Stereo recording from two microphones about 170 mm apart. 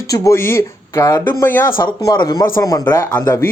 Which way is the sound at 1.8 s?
25° left (ahead or behind).